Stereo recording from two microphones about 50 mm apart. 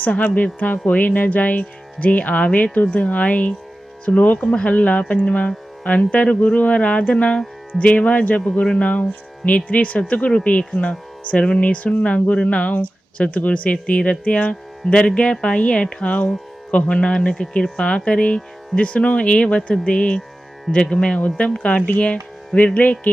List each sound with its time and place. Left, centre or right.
0.0 s speech: left
4.4 s speech: centre